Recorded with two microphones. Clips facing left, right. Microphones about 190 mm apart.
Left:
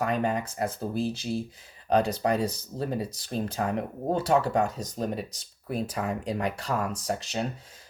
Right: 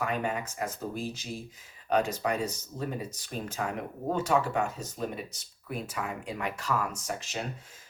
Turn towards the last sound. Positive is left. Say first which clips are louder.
# left 5 dB
turn(degrees=35)  # may be behind; listen again after turning